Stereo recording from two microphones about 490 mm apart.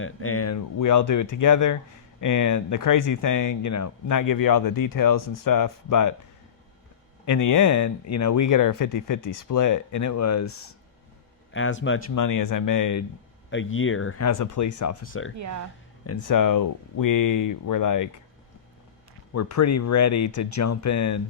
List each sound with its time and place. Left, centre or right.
0.0 s speech: left
7.3 s speech: left
11.5 s speech: left
12.1 s speech: left
13.5 s speech: left
15.0 s speech: left
15.4 s speech: right
16.0 s speech: left
19.3 s speech: left